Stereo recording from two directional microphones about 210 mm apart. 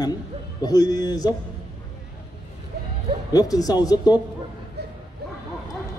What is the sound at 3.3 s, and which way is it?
Speech, 15° left (ahead or behind).